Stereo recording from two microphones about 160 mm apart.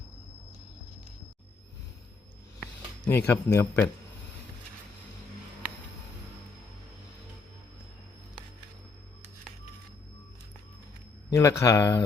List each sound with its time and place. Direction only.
2.6 s speech: 10° left (ahead or behind)
11.3 s speech: 20° left (ahead or behind)